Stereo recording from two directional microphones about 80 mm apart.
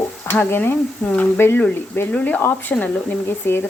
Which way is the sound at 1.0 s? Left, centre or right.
Centre.